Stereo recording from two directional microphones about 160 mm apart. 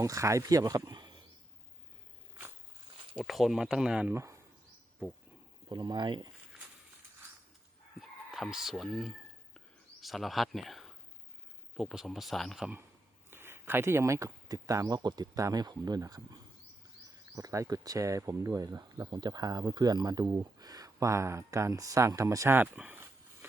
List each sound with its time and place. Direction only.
0.0 s speech: 20° right (ahead or behind)
3.2 s speech: centre (ahead or behind)
4.1 s speech: 20° right (ahead or behind)
5.6 s speech: 25° right (ahead or behind)
8.3 s speech: centre (ahead or behind)
9.6 s a sound: centre (ahead or behind)
11.7 s speech: centre (ahead or behind)